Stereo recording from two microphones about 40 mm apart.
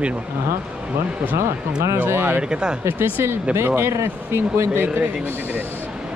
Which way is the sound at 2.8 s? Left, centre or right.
Right.